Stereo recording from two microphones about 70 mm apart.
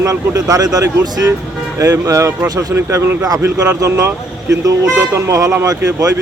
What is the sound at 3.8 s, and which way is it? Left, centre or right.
Speech, right.